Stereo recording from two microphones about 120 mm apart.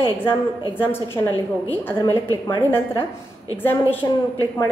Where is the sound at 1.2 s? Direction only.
30° left (ahead or behind).